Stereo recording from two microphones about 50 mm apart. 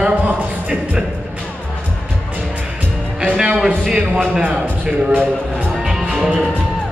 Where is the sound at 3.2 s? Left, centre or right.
Right.